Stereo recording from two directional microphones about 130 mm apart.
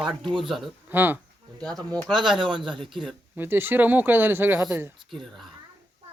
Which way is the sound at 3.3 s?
15° right (ahead or behind).